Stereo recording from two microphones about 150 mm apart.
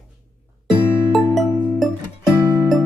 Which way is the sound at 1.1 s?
Centre (ahead or behind).